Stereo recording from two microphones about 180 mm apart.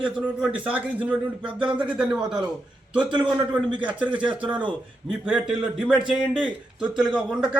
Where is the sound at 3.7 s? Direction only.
25° right (ahead or behind).